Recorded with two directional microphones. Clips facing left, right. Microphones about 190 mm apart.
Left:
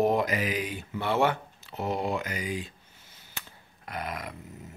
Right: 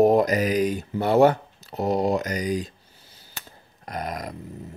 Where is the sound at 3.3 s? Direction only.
40° right (ahead or behind).